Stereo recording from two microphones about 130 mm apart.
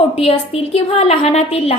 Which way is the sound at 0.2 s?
50° left (ahead or behind).